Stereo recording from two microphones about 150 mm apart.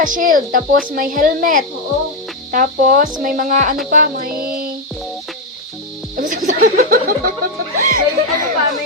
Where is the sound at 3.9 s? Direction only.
70° right (ahead or behind).